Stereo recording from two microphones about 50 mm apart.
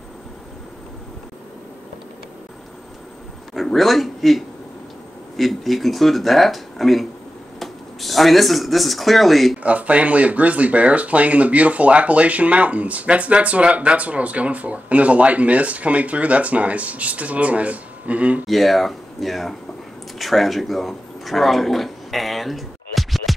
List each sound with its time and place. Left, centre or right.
3.5 s a man's voice: centre
9.6 s speech: right
18.5 s speech: centre
20.2 s a sound: centre